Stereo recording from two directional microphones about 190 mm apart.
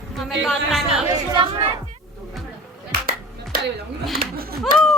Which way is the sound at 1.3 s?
25° right (ahead or behind).